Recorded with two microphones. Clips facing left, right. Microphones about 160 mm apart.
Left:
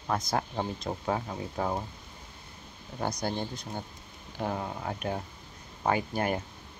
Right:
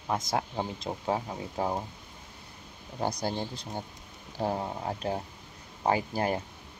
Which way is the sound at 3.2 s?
30° right (ahead or behind).